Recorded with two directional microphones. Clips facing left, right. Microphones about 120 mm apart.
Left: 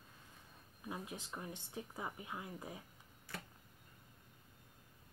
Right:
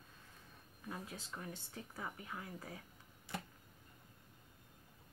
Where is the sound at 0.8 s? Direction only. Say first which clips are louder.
Left 2 dB; 15° left (ahead or behind).